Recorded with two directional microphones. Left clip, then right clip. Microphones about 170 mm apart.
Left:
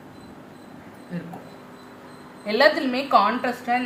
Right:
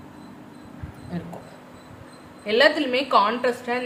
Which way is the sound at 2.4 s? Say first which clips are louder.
Even; 30° right (ahead or behind).